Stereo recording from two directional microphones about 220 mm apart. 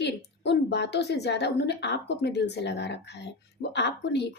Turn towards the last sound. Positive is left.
turn(degrees=50)  # may be behind; listen again after turning